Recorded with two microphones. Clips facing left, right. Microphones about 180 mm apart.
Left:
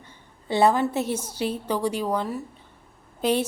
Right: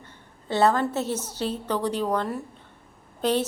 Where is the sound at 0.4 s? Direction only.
10° left (ahead or behind).